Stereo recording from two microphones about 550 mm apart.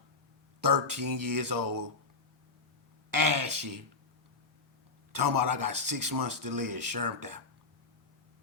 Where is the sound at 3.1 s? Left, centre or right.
Right.